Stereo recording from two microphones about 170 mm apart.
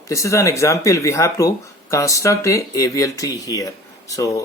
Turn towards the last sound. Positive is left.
turn(degrees=20)  # may be behind; listen again after turning